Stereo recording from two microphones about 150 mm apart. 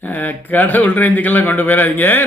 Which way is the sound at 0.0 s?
10° left (ahead or behind).